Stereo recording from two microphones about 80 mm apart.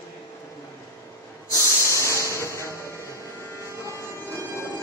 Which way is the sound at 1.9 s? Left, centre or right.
Left.